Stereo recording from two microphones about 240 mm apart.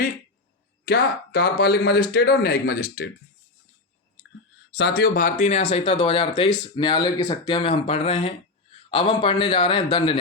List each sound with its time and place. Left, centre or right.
0.9 s speech: left
4.7 s speech: left; by 10.2 s centre